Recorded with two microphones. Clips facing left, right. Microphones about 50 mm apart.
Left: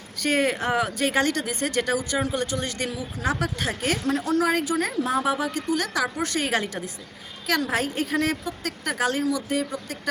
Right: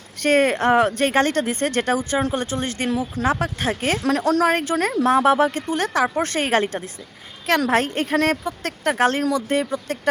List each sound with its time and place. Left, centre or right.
0.2 s a woman's voice: right
4.0 s speech: right
4.4 s a woman's voice: right
7.7 s speech: right